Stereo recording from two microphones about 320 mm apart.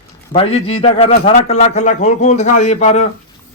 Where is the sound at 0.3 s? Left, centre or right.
Centre.